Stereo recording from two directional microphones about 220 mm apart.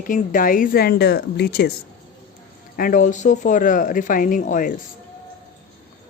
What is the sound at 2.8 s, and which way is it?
Speech, 40° left (ahead or behind).